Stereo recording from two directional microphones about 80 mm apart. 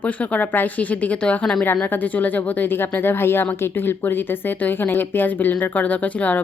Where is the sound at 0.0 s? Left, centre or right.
Centre.